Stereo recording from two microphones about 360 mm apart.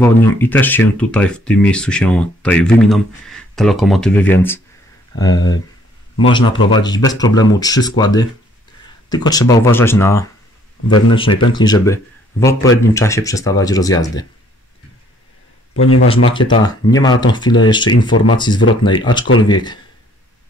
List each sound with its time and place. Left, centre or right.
0.0 s speech: centre
15.7 s speech: left
16.3 s speech: centre